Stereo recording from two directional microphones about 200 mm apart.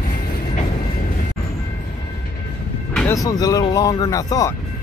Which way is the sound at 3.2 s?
20° left (ahead or behind).